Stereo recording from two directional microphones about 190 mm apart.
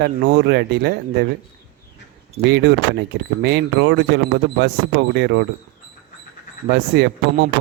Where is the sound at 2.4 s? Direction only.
65° right (ahead or behind).